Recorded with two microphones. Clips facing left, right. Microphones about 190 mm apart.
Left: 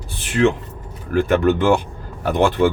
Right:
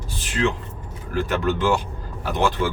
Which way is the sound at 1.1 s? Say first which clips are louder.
Left 7 dB; 55° left (ahead or behind).